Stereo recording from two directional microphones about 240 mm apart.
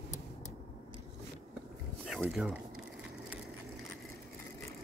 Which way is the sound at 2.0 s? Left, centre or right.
Centre.